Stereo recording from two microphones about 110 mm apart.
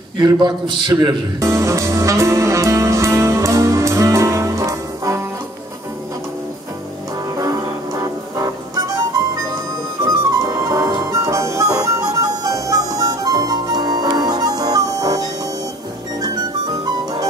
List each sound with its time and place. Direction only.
0.2 s music: 40° right (ahead or behind)
7.3 s music: 30° right (ahead or behind)
10.0 s music: 35° right (ahead or behind)
16.8 s music: 35° right (ahead or behind)